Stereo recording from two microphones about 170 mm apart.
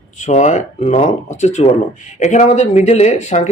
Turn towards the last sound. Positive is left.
turn(degrees=45)  # may be behind; listen again after turning